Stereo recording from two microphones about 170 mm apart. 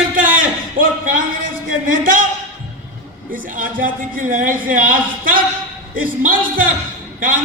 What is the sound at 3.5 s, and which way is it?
A man's voice, 55° right (ahead or behind).